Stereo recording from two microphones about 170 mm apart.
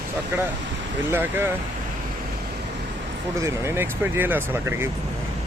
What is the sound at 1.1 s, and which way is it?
Speech, 15° right (ahead or behind).